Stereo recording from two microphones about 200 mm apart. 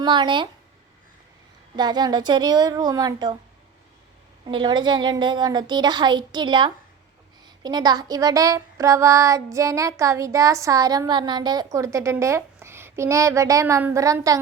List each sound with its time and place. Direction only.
0.0 s a woman's voice: 25° right (ahead or behind)
1.7 s a woman's voice: 20° right (ahead or behind)
4.4 s a woman's voice: 25° right (ahead or behind)
7.4 s a sound: 20° right (ahead or behind)